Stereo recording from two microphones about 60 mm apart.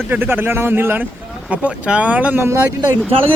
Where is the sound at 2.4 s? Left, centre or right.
Right.